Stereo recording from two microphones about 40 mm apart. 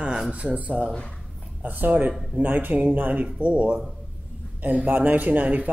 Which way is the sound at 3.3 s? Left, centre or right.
Right.